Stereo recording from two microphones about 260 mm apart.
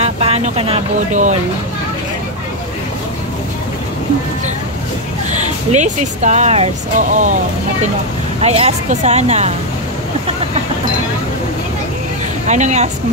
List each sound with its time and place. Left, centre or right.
0.0 s speech: right
5.3 s speech: right
8.4 s speech: right
12.4 s speech: right